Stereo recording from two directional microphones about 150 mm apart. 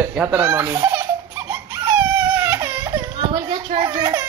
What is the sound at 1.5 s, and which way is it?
Baby cry, 15° right (ahead or behind).